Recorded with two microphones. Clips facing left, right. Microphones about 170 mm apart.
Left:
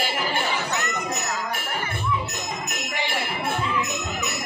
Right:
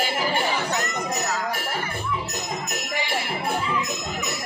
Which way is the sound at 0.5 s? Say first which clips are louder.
Right 2 dB; 35° right (ahead or behind).